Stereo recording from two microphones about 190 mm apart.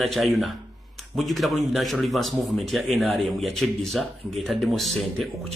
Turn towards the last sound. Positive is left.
turn(degrees=0)  # may be behind; listen again after turning